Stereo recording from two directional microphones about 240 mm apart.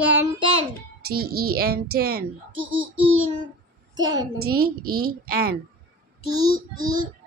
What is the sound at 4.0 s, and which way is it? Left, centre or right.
Speech, centre.